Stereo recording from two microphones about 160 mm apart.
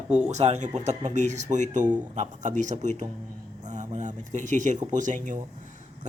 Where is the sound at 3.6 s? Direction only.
50° right (ahead or behind).